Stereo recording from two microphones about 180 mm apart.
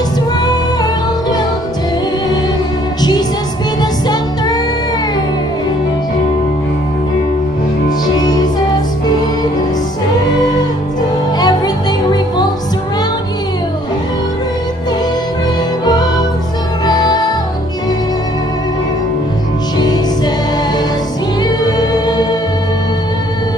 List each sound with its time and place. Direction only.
3.0 s music: 20° left (ahead or behind)
11.3 s music: 20° left (ahead or behind)
16.8 s music: 20° left (ahead or behind)
19.8 s music: 25° left (ahead or behind)
21.4 s music: 25° left (ahead or behind)